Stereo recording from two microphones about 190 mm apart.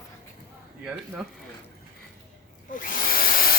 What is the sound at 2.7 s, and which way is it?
Drill, 45° left (ahead or behind).